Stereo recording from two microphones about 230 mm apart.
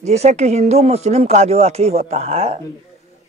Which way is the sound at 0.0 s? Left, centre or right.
Right.